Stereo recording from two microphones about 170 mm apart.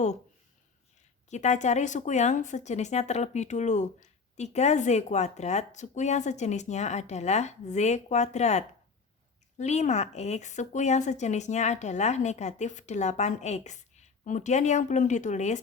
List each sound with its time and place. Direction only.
1.3 s speech: 45° left (ahead or behind)